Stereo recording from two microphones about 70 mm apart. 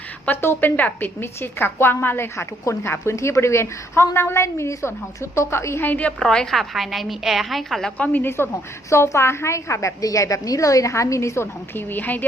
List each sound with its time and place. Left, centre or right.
0.3 s a woman's voice: left
5.9 s a woman's voice: centre
7.9 s a woman's voice: left
8.9 s a woman's voice: left
11.7 s a woman's voice: left